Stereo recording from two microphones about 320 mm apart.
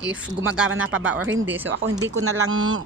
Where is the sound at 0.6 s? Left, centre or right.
Right.